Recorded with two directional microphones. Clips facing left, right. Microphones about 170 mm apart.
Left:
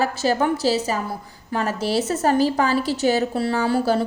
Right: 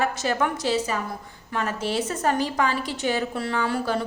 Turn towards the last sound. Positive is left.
turn(degrees=35)  # may be behind; listen again after turning